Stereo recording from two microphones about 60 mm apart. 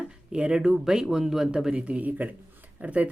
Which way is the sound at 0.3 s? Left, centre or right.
Centre.